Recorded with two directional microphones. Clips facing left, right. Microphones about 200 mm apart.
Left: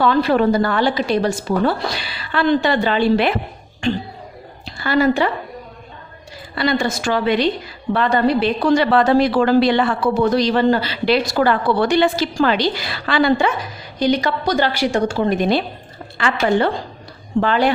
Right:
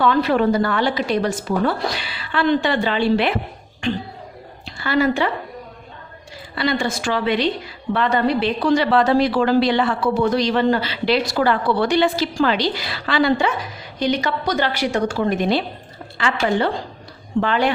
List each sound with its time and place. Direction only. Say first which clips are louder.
0.0 s a woman's voice: left 2 dB; 35° left (ahead or behind)
4.6 s a woman's voice: left 2 dB; 40° left (ahead or behind)
6.6 s a woman's voice: left 2 dB; 45° left (ahead or behind)
14.0 s a woman's voice: left 3 dB; 35° left (ahead or behind)
16.1 s a woman's voice: left 3 dB; 50° left (ahead or behind)
17.4 s a woman's voice: left 3 dB; 35° left (ahead or behind)